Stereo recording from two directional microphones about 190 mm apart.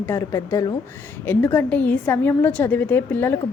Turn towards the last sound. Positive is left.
turn(degrees=10)  # may be behind; listen again after turning